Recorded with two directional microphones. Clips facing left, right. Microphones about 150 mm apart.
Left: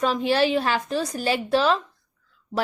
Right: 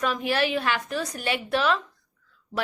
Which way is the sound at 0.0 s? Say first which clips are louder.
Left 4 dB; 30° left (ahead or behind).